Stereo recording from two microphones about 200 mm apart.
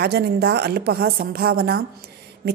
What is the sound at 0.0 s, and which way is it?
A woman's voice, 55° right (ahead or behind).